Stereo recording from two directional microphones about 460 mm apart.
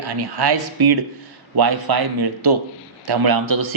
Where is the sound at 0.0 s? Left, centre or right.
Right.